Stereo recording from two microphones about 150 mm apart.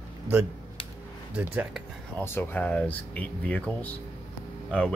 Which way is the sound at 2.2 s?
15° left (ahead or behind).